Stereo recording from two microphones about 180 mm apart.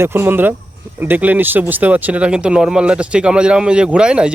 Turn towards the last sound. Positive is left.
turn(degrees=-5)  # may be behind; listen again after turning